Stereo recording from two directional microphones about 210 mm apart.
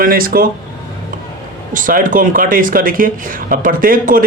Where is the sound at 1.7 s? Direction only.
40° right (ahead or behind).